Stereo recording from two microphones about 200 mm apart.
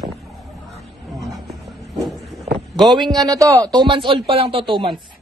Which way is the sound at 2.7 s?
20° right (ahead or behind).